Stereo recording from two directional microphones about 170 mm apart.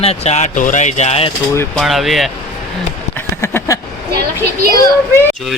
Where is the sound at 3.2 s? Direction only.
15° left (ahead or behind).